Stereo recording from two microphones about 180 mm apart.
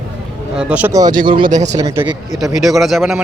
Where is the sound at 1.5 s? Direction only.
40° right (ahead or behind).